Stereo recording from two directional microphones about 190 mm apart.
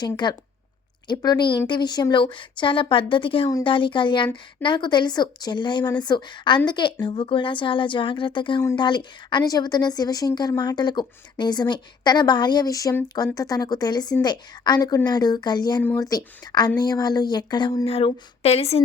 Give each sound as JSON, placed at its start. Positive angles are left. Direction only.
{"t": 0.0, "sound": "a woman's voice", "side_deg": 25}